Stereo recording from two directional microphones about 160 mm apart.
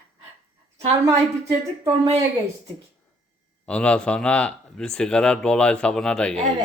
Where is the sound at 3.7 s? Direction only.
5° left (ahead or behind).